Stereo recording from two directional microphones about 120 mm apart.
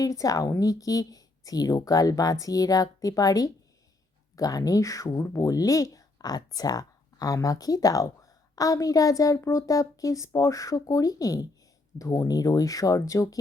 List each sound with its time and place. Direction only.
0.0 s a woman's voice: 30° left (ahead or behind)